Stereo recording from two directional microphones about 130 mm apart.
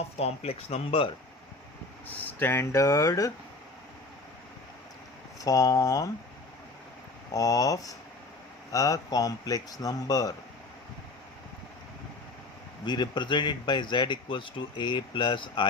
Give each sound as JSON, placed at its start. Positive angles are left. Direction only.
{"t": 0.2, "sound": "speech", "side_deg": 55}
{"t": 2.4, "sound": "speech", "side_deg": 20}
{"t": 5.4, "sound": "speech", "side_deg": 25}
{"t": 7.3, "sound": "speech", "side_deg": 25}
{"t": 12.8, "sound": "speech", "side_deg": 35}